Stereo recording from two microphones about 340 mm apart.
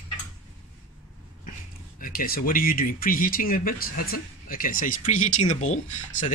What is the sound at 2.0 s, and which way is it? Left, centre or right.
Speech, left.